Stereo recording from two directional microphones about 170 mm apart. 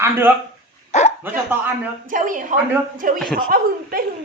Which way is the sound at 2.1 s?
50° right (ahead or behind).